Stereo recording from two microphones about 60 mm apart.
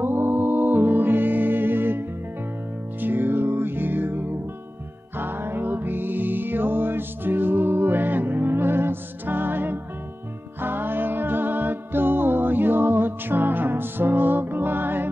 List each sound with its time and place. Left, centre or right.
0.0 s music: right